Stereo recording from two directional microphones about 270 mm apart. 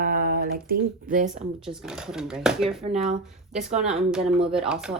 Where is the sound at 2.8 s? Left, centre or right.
Right.